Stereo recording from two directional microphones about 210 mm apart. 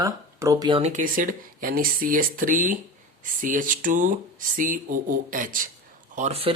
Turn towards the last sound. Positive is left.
turn(degrees=-30)  # may be behind; listen again after turning